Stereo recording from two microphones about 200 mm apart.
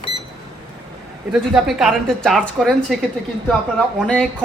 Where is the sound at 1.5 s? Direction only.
Centre (ahead or behind).